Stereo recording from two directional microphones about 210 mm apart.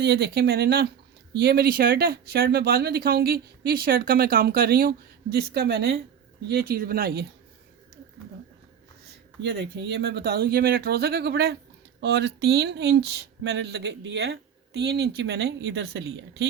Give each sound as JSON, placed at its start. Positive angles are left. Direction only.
{"t": 0.0, "sound": "speech", "side_deg": -50}
{"t": 9.4, "sound": "speech", "side_deg": -55}